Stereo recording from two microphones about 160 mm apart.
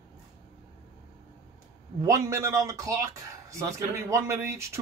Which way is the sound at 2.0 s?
20° right (ahead or behind).